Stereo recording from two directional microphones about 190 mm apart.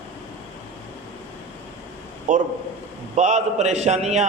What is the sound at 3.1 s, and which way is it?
A man's voice, 35° right (ahead or behind).